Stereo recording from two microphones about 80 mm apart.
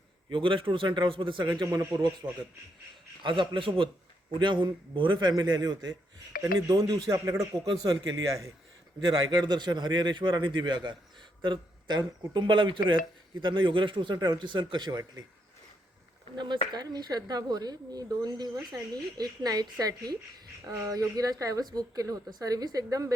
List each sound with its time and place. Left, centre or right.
0.3 s speech: right
1.5 s speech: right
2.2 s a man's voice: right
3.2 s speech: right
4.4 s speech: right
5.3 s speech: right
9.0 s a man's voice: right
16.3 s speech: right